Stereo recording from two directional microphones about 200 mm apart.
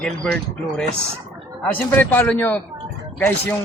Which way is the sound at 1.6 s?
10° left (ahead or behind).